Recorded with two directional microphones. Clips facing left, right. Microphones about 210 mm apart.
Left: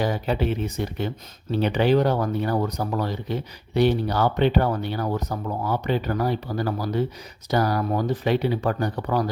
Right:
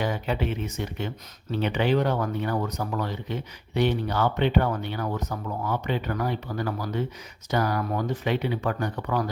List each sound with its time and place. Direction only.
0.0 s speech: 35° left (ahead or behind)